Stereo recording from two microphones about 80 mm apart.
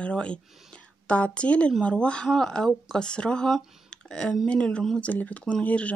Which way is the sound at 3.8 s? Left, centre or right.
Centre.